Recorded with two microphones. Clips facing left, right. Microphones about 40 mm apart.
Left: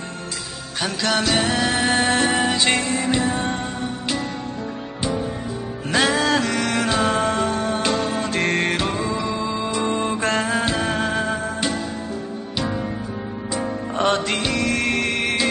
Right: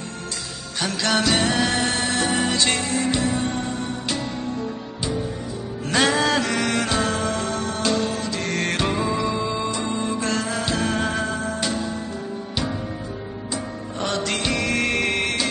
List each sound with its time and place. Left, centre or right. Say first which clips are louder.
0.7 s music: even; centre
2.0 s music: left 4 dB; left
2.3 s music: left 2 dB; centre
5.9 s music: left 1 dB; centre
7.0 s music: left 4 dB; left
8.2 s music: left 5 dB; left
8.6 s music: even; centre
9.8 s music: left 3 dB; left
10.7 s music: left 1 dB; centre
13.9 s music: left 6 dB; left
14.2 s music: left 2 dB; centre
14.5 s music: even; centre